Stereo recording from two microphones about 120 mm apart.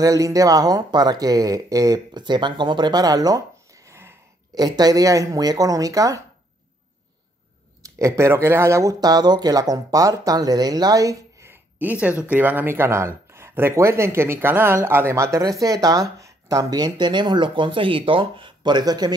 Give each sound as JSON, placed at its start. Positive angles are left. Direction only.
{"t": 0.0, "sound": "speech", "side_deg": -30}
{"t": 4.6, "sound": "speech", "side_deg": -35}
{"t": 8.0, "sound": "speech", "side_deg": -25}